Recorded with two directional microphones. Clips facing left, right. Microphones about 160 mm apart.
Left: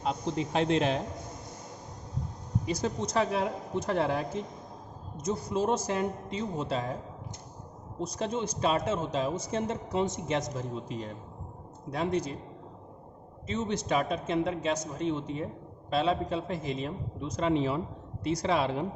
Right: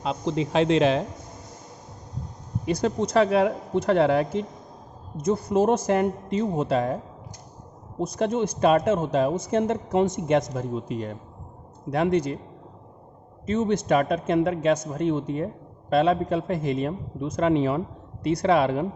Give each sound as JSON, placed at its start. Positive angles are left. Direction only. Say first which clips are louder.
{"t": 0.0, "sound": "a man's voice", "louder": "right 5 dB", "side_deg": -90}
{"t": 2.6, "sound": "speech", "louder": "right 8 dB", "side_deg": -60}
{"t": 5.2, "sound": "a man's voice", "louder": "right 8 dB", "side_deg": -55}
{"t": 7.9, "sound": "a man's voice", "louder": "right 8 dB", "side_deg": -60}
{"t": 13.5, "sound": "a man's voice", "louder": "right 8 dB", "side_deg": -50}